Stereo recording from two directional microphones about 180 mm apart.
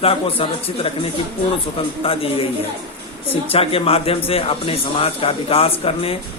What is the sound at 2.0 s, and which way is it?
Speech, 30° left (ahead or behind).